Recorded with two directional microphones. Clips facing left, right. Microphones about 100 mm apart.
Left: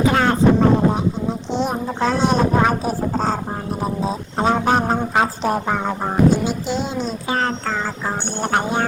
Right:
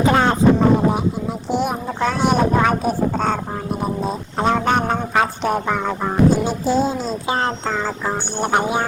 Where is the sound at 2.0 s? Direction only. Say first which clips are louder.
Even; centre (ahead or behind).